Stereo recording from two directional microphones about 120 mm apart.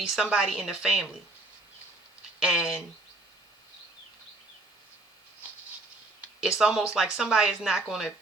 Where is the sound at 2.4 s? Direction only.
5° right (ahead or behind).